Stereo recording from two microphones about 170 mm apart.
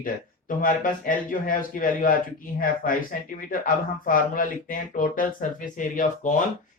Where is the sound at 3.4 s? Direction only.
55° left (ahead or behind).